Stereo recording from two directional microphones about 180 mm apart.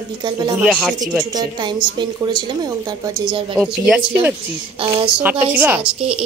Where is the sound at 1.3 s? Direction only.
25° right (ahead or behind).